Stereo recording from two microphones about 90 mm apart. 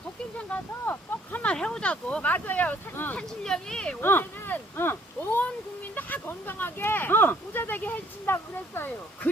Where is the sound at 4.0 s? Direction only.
25° left (ahead or behind).